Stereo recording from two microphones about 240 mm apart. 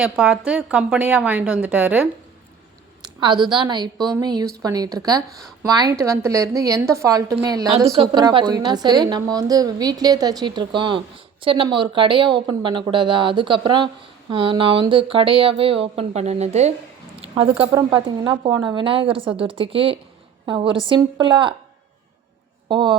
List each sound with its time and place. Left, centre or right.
0.0 s a woman's voice: centre
3.0 s a woman's voice: centre
17.2 s a sound: right
17.6 s speech: centre
22.7 s speech: centre